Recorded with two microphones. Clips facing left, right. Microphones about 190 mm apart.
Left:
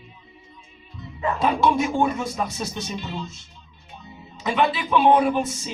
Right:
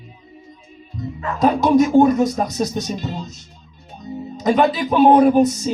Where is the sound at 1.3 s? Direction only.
40° right (ahead or behind).